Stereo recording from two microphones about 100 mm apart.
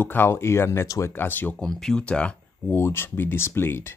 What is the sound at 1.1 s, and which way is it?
Speech, 20° left (ahead or behind).